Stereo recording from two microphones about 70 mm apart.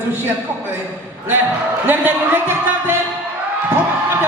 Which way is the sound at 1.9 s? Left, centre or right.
Right.